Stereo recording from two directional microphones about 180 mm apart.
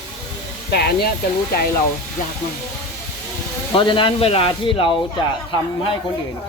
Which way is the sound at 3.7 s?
25° left (ahead or behind).